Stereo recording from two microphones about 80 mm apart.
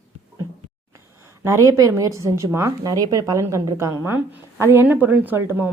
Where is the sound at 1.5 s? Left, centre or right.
Right.